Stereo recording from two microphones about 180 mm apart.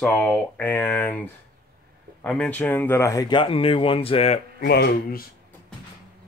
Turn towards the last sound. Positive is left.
turn(degrees=55)  # may be behind; listen again after turning